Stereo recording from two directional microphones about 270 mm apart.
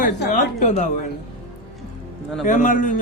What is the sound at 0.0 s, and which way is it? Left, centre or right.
Speech, left.